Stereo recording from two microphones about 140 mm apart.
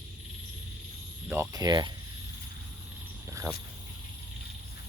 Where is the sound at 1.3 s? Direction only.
20° right (ahead or behind).